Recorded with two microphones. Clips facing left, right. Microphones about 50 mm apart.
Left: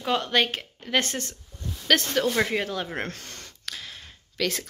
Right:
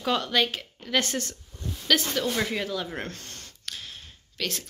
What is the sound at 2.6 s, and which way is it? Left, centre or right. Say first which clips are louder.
Speech: left 1 dB; left.